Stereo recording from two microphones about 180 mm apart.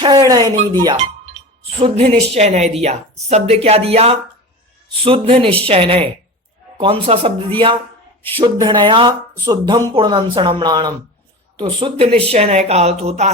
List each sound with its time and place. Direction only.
0.3 s speech: 20° right (ahead or behind)
0.9 s chink: 35° right (ahead or behind)
1.8 s speech: 35° right (ahead or behind)